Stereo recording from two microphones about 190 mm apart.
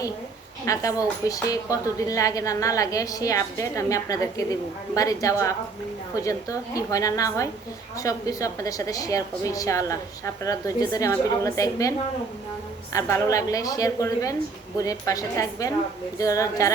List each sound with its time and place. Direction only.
0.6 s a woman's voice: 15° left (ahead or behind)